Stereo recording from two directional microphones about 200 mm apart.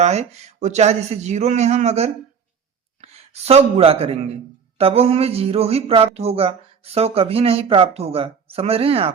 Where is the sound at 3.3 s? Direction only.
30° right (ahead or behind).